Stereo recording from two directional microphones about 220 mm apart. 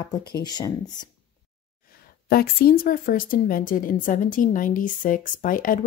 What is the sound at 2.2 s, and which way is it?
Speech, 45° left (ahead or behind).